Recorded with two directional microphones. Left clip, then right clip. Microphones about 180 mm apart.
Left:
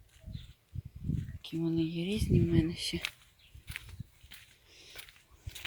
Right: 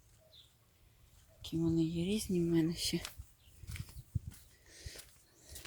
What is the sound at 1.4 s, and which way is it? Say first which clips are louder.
Speech: left 1 dB; centre (ahead or behind).